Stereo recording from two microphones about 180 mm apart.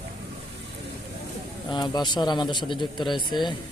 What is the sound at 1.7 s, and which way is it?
Speech, 25° left (ahead or behind).